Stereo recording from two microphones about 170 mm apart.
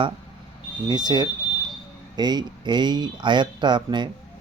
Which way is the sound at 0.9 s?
25° right (ahead or behind).